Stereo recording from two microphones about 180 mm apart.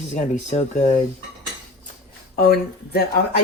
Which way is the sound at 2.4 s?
55° left (ahead or behind).